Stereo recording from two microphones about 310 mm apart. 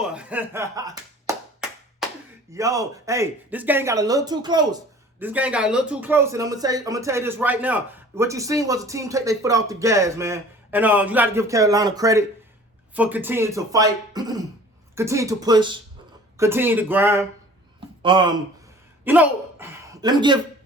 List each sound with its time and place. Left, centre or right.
0.0 s speech: centre
1.3 s clapping: centre
2.5 s speech: centre
19.0 s a sound: centre